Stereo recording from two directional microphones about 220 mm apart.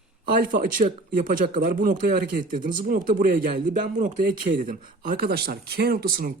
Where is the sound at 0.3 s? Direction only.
40° right (ahead or behind).